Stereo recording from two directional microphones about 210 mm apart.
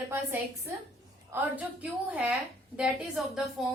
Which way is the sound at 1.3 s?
10° right (ahead or behind).